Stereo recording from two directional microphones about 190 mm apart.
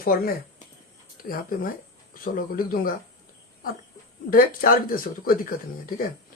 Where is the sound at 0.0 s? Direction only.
50° left (ahead or behind).